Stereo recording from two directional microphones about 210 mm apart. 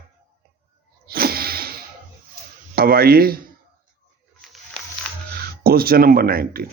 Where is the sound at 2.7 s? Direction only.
45° right (ahead or behind).